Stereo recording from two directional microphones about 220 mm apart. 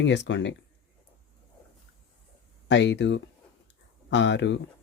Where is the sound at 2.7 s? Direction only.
55° left (ahead or behind).